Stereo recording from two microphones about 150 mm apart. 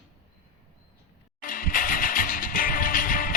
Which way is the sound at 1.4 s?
70° left (ahead or behind).